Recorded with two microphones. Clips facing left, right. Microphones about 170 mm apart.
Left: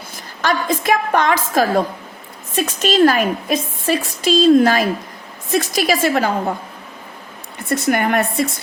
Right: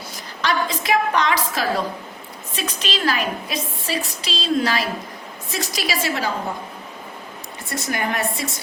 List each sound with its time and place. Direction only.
0.4 s a woman's voice: 50° left (ahead or behind)
7.7 s speech: 55° left (ahead or behind)